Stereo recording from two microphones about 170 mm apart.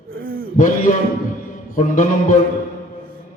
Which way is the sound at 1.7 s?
50° left (ahead or behind).